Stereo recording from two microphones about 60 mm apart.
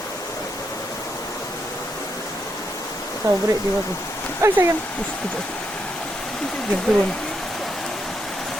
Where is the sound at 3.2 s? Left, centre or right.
Right.